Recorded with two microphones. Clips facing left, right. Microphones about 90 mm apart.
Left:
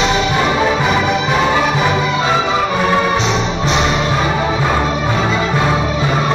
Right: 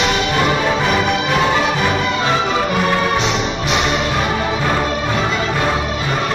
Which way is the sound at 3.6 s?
30° left (ahead or behind).